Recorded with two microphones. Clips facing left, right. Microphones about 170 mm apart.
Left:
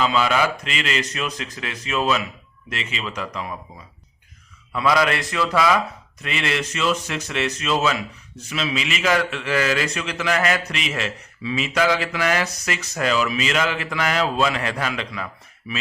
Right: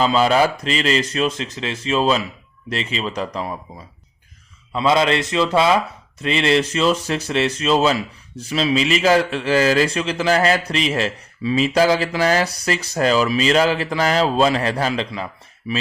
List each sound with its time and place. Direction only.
0.0 s speech: 35° right (ahead or behind)
4.7 s speech: 25° right (ahead or behind)